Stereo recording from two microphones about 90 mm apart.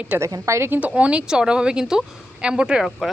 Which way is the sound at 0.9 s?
15° right (ahead or behind).